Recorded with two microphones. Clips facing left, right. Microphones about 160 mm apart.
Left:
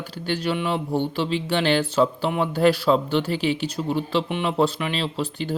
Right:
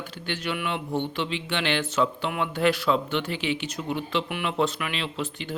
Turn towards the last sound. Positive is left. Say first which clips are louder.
# left 5 dB
turn(degrees=35)  # may be behind; listen again after turning